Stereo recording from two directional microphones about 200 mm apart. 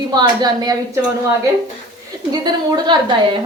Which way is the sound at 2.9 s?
25° right (ahead or behind).